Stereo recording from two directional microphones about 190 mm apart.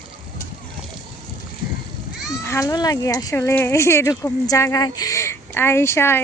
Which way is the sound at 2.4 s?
15° left (ahead or behind).